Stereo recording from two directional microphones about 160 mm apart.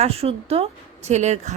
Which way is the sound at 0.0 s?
40° right (ahead or behind).